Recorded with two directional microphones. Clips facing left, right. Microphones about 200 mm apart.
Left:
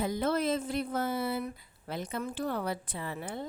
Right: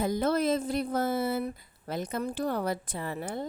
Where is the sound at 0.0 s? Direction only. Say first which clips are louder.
Right 3 dB; 40° right (ahead or behind).